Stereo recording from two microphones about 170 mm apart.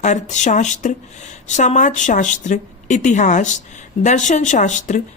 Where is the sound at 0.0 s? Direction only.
45° left (ahead or behind).